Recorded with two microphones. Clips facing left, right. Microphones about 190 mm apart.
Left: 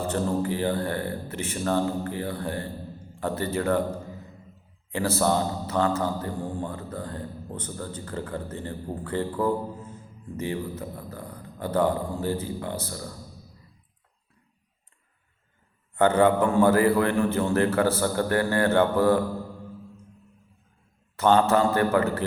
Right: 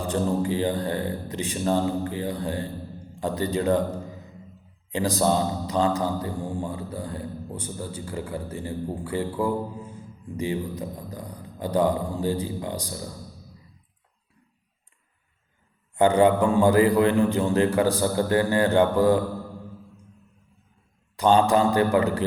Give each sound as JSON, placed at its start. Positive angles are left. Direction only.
{"t": 0.0, "sound": "a man's voice", "side_deg": -15}
{"t": 4.9, "sound": "a man's voice", "side_deg": -15}
{"t": 16.0, "sound": "a man's voice", "side_deg": -15}
{"t": 21.2, "sound": "a man's voice", "side_deg": -15}